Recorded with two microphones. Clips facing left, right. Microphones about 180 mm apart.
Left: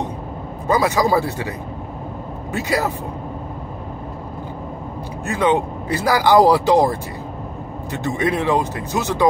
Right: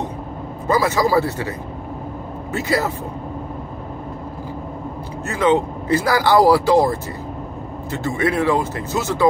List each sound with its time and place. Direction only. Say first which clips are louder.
0.7 s speech: even; 15° left (ahead or behind)
2.5 s speech: even; 15° left (ahead or behind)
5.2 s speech: right 1 dB; 15° left (ahead or behind)